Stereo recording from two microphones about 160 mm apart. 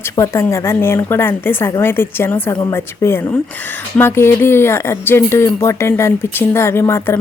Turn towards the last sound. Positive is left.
turn(degrees=15)  # may be behind; listen again after turning